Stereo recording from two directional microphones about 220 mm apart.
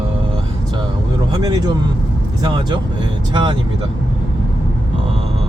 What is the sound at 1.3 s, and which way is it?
Speech, 15° right (ahead or behind).